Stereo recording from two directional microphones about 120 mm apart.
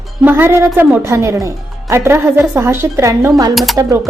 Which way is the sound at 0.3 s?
20° right (ahead or behind).